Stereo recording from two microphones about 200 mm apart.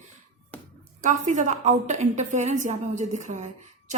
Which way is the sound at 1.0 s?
40° right (ahead or behind).